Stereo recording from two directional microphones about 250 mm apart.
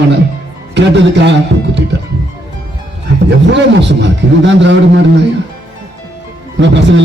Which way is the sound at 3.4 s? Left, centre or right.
Right.